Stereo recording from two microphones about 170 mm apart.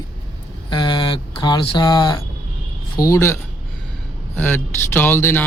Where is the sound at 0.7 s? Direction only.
25° left (ahead or behind).